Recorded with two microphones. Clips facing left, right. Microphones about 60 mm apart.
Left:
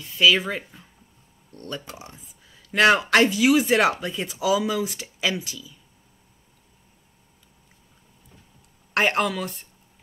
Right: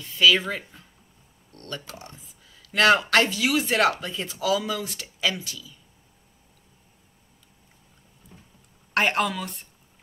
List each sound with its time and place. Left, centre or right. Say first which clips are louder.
0.2 s speech: left 1 dB; centre
8.9 s speech: left 1 dB; centre